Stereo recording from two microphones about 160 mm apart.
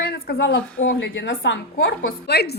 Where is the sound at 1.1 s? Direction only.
90° left.